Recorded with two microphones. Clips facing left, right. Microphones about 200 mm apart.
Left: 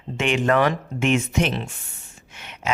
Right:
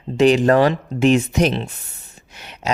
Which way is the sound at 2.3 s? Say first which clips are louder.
Right 2 dB; 35° right (ahead or behind).